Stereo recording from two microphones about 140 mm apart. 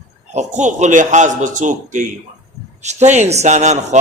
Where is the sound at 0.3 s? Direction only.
55° right (ahead or behind).